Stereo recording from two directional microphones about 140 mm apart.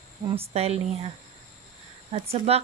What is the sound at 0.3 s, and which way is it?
Speech, 45° right (ahead or behind).